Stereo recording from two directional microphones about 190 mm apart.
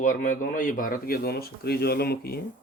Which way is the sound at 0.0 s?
45° left (ahead or behind).